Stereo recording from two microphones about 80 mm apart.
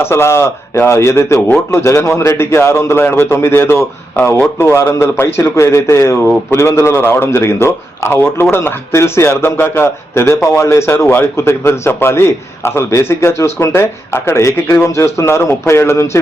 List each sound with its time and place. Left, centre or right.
0.0 s a man's voice: left